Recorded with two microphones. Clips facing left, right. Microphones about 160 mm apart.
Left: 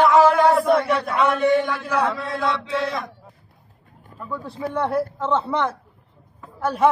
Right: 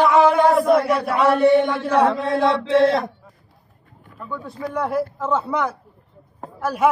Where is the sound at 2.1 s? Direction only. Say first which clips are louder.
Right 6 dB; 30° right (ahead or behind).